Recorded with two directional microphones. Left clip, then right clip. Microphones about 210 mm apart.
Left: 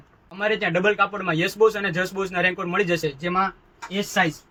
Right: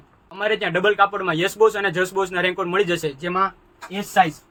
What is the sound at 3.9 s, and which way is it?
Speech, 5° right (ahead or behind).